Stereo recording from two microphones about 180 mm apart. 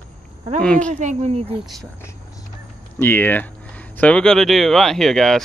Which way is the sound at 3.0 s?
10° left (ahead or behind).